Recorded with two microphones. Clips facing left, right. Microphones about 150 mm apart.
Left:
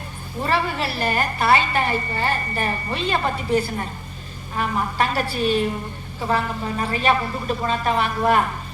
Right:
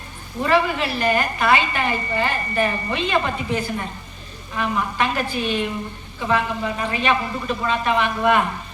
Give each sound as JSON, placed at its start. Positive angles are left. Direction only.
{"t": 0.4, "sound": "a woman's voice", "side_deg": 35}